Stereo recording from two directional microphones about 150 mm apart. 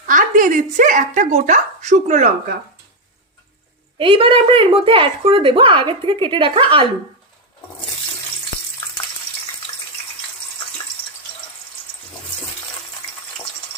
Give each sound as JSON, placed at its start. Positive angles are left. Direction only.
{"t": 0.1, "sound": "speech", "side_deg": -60}
{"t": 3.9, "sound": "speech", "side_deg": -35}